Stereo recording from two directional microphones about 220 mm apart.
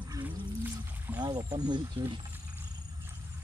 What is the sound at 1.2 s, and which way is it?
Speech, 15° right (ahead or behind).